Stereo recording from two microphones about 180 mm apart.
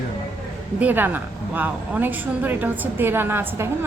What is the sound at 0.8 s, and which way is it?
A woman's voice, 10° right (ahead or behind).